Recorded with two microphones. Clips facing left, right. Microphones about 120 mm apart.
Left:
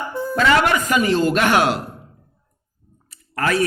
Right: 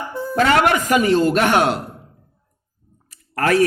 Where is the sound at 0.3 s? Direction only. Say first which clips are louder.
Right 1 dB; 55° right (ahead or behind).